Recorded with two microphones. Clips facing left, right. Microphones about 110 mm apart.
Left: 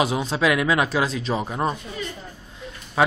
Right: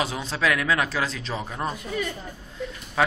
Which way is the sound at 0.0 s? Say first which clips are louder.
Left 4 dB; 15° left (ahead or behind).